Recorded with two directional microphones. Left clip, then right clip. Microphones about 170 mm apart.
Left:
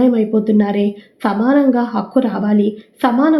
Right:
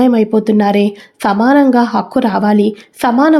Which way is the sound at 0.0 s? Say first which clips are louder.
Right 3 dB; 25° right (ahead or behind).